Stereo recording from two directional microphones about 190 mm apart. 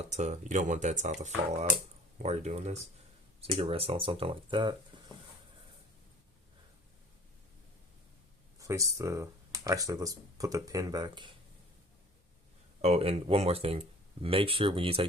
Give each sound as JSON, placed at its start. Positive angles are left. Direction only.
{"t": 0.1, "sound": "speech", "side_deg": -40}
{"t": 8.5, "sound": "speech", "side_deg": -15}
{"t": 12.8, "sound": "speech", "side_deg": -30}